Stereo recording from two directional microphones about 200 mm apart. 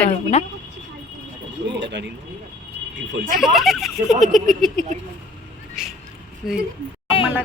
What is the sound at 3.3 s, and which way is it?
Speech, centre (ahead or behind).